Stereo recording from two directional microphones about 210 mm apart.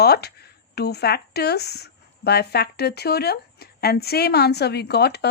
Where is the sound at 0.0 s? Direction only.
50° left (ahead or behind).